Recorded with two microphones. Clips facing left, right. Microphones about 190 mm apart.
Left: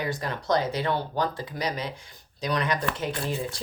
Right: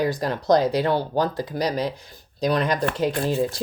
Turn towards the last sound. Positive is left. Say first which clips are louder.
# right 8 dB
turn(degrees=-40)  # may be behind; listen again after turning